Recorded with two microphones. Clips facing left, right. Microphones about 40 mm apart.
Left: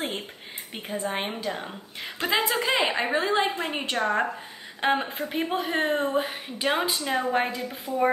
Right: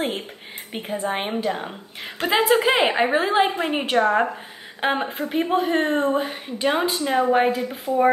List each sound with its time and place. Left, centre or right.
0.7 s a woman's voice: centre; by 2.9 s right
2.9 s a woman's voice: right
4.8 s a woman's voice: centre
7.0 s speech: centre